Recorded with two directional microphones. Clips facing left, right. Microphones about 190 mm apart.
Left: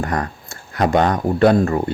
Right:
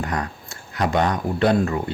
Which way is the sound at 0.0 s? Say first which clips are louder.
Left 4 dB; 50° left (ahead or behind).